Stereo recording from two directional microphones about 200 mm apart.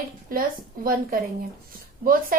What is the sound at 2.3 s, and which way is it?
Speech, 45° right (ahead or behind).